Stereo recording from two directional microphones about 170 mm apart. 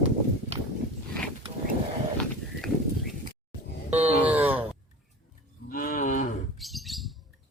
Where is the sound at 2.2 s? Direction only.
5° left (ahead or behind).